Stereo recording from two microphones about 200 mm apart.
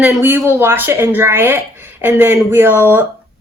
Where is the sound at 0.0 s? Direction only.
10° right (ahead or behind).